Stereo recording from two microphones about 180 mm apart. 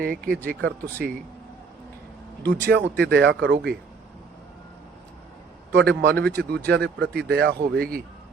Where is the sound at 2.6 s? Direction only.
70° right (ahead or behind).